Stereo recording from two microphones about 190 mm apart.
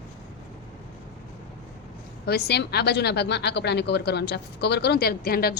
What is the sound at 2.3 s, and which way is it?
Speech, 60° left (ahead or behind).